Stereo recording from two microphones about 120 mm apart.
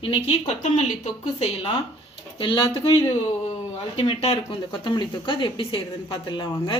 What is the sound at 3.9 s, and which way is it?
Speech, 55° left (ahead or behind).